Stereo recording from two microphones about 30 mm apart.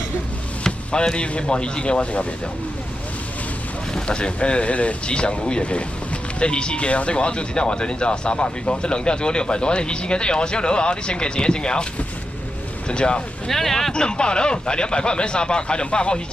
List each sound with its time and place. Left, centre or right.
0.9 s speech: left
3.9 s speech: left
5.0 s speech: left
12.8 s speech: left
13.5 s speech: centre
13.9 s speech: left